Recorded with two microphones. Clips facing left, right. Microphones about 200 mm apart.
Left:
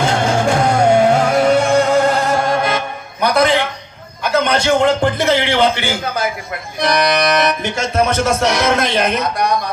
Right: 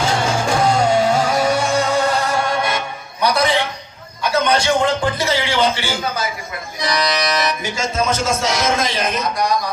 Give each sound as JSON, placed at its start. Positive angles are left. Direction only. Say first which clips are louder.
{"t": 0.0, "sound": "music", "louder": "left 3 dB", "side_deg": 60}